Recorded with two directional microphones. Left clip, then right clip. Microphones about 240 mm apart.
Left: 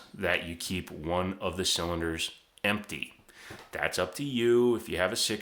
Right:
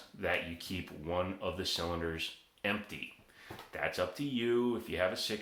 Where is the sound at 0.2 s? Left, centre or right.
Left.